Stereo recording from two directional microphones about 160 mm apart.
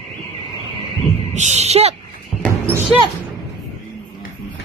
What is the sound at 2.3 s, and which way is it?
Basketball bounce, 10° right (ahead or behind).